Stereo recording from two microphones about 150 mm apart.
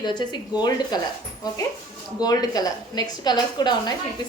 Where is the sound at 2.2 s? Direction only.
25° left (ahead or behind).